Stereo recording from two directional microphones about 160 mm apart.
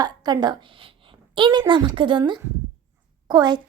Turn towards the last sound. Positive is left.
turn(degrees=-25)  # may be behind; listen again after turning